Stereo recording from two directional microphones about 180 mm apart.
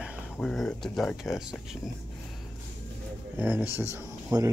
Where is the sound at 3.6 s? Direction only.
15° left (ahead or behind).